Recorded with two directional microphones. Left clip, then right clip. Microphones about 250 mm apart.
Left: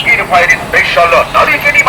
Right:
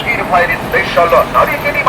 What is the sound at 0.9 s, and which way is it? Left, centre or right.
Speech, centre.